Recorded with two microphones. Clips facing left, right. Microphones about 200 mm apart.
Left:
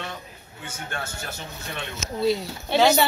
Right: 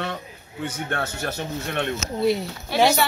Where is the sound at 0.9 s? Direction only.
65° right (ahead or behind).